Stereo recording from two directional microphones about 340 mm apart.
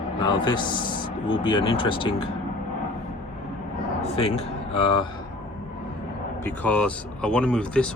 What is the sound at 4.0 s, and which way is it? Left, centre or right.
Speech, centre.